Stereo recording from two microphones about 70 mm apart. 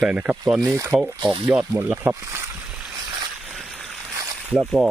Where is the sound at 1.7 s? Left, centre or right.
Right.